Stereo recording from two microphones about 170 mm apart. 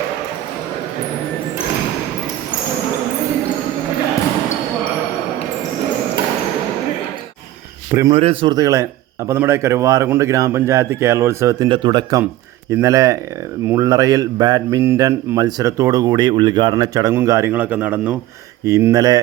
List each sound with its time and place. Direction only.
7.9 s speech: 20° right (ahead or behind)
8.1 s a man's voice: 30° right (ahead or behind)